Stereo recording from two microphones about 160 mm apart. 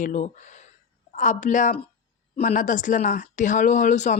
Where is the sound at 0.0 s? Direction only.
50° left (ahead or behind).